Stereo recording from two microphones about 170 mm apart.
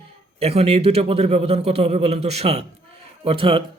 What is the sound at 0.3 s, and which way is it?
A man's voice, 35° right (ahead or behind).